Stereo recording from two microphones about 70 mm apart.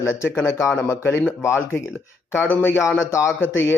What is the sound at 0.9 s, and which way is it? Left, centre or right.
Speech, left.